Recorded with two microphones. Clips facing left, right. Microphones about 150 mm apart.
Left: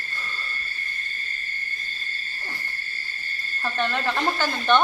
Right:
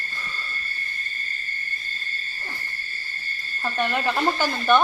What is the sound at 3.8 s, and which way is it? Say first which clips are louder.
Speech: right 2 dB; 15° right (ahead or behind).